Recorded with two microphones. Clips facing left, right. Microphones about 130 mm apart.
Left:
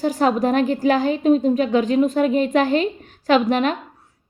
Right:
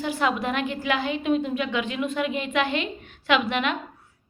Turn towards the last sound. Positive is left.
turn(degrees=40)  # may be behind; listen again after turning